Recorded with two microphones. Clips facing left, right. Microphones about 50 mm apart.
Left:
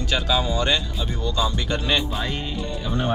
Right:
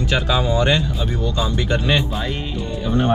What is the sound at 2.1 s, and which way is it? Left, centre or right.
Music, centre.